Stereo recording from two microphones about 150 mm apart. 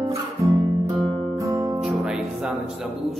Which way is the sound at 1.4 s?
25° right (ahead or behind).